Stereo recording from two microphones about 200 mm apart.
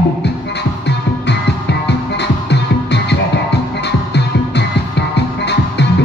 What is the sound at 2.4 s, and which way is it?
Music, 60° left (ahead or behind).